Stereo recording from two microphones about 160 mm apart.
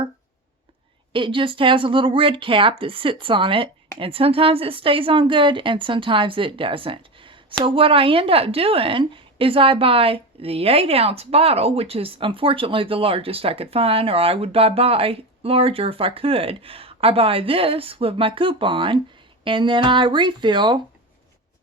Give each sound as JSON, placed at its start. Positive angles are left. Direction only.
{"t": 1.1, "sound": "a woman's voice", "side_deg": -30}